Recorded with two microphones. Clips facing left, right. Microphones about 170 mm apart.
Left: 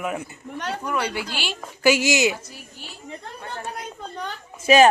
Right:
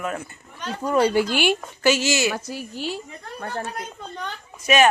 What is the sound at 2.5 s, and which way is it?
Speech, 90° right.